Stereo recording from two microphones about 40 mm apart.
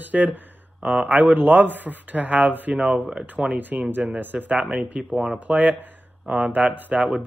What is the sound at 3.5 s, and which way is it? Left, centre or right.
Speech, right.